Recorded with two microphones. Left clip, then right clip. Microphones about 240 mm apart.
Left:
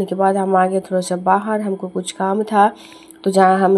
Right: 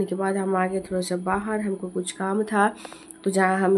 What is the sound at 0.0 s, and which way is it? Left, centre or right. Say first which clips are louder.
Speech: left 9 dB; centre.